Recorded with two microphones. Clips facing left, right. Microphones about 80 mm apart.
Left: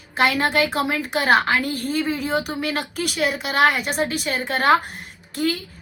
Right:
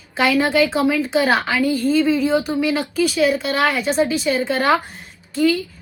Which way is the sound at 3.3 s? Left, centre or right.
Centre.